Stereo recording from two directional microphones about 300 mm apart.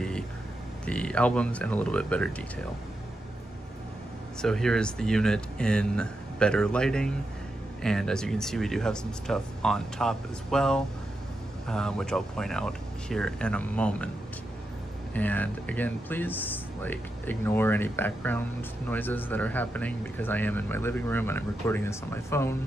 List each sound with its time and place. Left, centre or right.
0.8 s speech: centre
4.4 s speech: centre
15.1 s speech: centre